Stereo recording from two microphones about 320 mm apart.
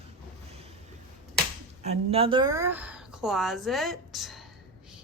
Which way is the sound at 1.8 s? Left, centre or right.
Centre.